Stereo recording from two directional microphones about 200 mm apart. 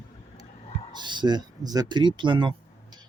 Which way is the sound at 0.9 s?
20° right (ahead or behind).